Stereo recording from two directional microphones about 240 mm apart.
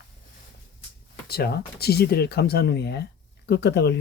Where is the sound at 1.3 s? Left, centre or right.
Left.